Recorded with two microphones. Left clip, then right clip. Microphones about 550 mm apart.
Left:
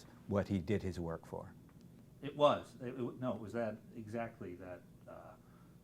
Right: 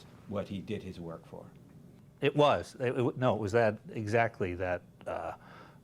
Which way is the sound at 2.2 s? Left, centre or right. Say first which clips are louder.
Right 6 dB; right.